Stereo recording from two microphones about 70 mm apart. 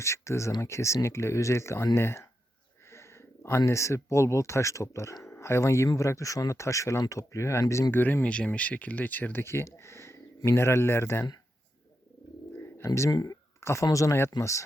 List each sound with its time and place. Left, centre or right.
0.0 s speech: left
2.9 s a sound: left
3.7 s speech: left
7.9 s speech: left
9.4 s speech: left
12.5 s bird: left
13.1 s speech: left
13.6 s speech: left
13.8 s speech: left